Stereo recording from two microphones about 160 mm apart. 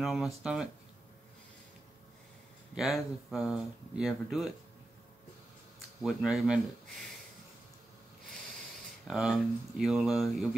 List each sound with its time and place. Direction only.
0.0 s speech: centre (ahead or behind)
2.7 s speech: centre (ahead or behind)
6.0 s speech: 5° right (ahead or behind)
9.0 s speech: centre (ahead or behind)